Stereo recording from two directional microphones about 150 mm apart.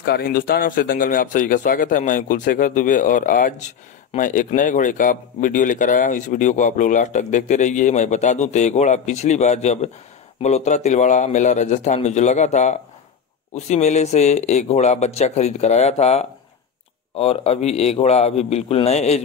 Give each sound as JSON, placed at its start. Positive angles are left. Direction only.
{"t": 0.0, "sound": "speech", "side_deg": 80}